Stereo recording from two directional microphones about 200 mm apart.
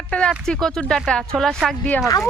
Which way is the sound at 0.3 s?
Centre (ahead or behind).